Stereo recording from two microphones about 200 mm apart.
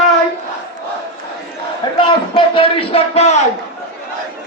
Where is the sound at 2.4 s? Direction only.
25° left (ahead or behind).